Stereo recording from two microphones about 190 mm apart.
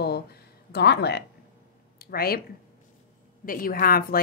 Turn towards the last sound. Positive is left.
turn(degrees=50)  # may be behind; listen again after turning